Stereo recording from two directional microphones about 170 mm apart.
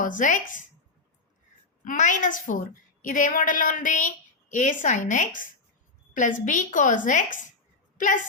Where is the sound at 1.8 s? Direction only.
50° left (ahead or behind).